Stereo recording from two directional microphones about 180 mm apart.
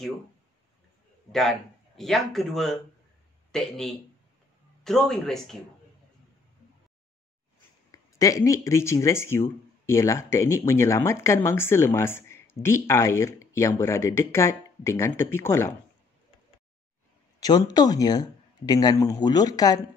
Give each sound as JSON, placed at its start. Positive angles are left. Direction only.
{"t": 1.3, "sound": "speech", "side_deg": 0}
{"t": 7.9, "sound": "speech", "side_deg": 20}
{"t": 17.4, "sound": "speech", "side_deg": 20}